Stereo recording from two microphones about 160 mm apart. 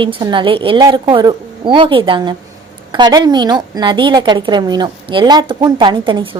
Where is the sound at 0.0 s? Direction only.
30° right (ahead or behind).